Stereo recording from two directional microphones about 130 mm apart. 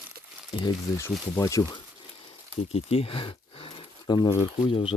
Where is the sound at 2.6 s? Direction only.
50° left (ahead or behind).